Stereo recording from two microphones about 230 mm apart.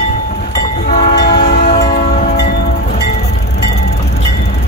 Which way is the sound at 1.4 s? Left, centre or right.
Left.